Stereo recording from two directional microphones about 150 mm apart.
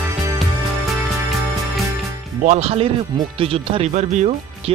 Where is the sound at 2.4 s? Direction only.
50° right (ahead or behind).